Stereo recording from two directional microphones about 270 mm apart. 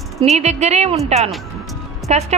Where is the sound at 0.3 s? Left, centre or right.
Right.